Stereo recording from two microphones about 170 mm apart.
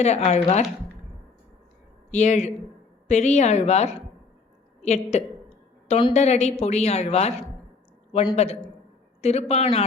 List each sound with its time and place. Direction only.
0.0 s a woman's voice: 40° left (ahead or behind)
2.0 s a woman's voice: 45° left (ahead or behind)
8.1 s a man's voice: 25° left (ahead or behind)
9.2 s a woman's voice: 40° left (ahead or behind)